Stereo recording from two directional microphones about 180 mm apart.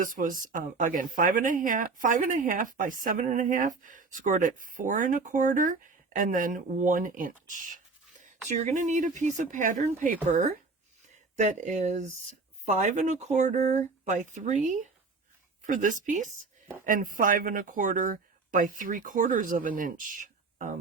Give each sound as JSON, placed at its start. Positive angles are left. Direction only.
{"t": 0.0, "sound": "speech", "side_deg": -50}